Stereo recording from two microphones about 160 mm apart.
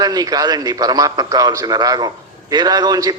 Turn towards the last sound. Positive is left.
turn(degrees=-25)  # may be behind; listen again after turning